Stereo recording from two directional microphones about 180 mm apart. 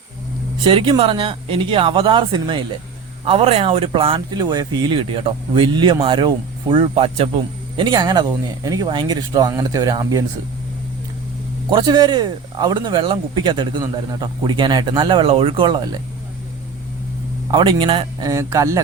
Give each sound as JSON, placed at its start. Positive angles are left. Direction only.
{"t": 0.6, "sound": "speech", "side_deg": -25}
{"t": 7.8, "sound": "speech", "side_deg": -20}
{"t": 11.7, "sound": "speech", "side_deg": -25}
{"t": 17.5, "sound": "speech", "side_deg": -30}